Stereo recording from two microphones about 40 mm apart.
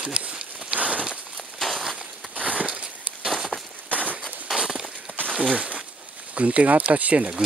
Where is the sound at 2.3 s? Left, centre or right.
Right.